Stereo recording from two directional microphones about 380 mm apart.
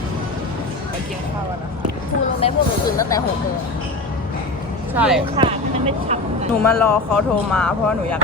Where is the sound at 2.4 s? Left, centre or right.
Centre.